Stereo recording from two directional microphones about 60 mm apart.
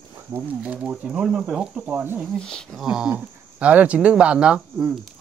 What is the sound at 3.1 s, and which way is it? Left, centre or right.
Speech, right.